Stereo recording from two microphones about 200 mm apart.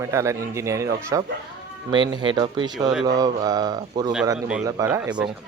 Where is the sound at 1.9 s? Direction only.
20° right (ahead or behind).